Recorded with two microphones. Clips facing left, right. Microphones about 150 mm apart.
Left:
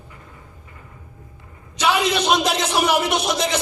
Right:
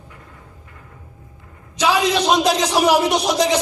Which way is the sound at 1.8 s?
35° right (ahead or behind).